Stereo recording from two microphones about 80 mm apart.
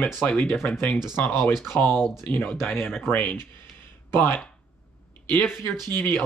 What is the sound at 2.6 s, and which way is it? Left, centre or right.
Speech, centre.